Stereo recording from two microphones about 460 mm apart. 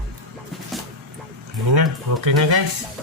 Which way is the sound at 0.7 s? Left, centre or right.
Centre.